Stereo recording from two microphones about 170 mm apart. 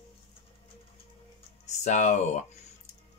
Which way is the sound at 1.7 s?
45° left (ahead or behind).